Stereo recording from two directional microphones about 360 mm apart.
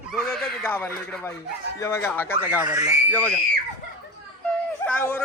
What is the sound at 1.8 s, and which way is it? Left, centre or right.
Speech, centre.